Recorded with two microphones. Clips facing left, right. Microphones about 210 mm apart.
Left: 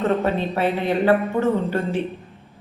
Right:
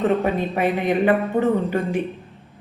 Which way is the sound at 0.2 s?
15° right (ahead or behind).